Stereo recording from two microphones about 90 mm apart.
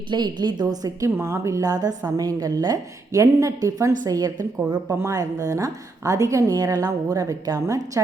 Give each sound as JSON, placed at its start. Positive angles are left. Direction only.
{"t": 0.1, "sound": "a woman's voice", "side_deg": -55}
{"t": 1.1, "sound": "a woman's voice", "side_deg": -30}